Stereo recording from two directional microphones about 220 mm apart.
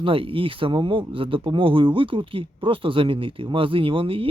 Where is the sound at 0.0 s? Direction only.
25° right (ahead or behind).